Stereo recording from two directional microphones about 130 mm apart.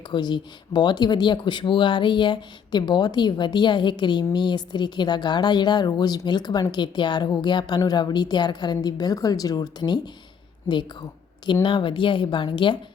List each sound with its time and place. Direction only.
0.1 s speech: 35° left (ahead or behind)
11.6 s speech: 40° left (ahead or behind)